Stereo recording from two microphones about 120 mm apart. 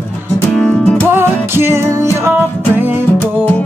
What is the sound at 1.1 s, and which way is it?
Music, 20° right (ahead or behind).